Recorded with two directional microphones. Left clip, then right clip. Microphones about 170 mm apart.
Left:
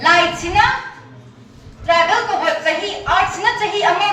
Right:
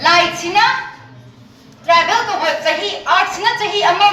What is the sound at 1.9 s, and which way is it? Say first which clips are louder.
A woman's voice: right 1 dB; 30° right (ahead or behind).